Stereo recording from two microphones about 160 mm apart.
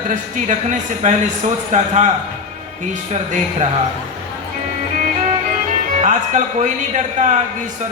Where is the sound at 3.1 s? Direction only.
45° right (ahead or behind).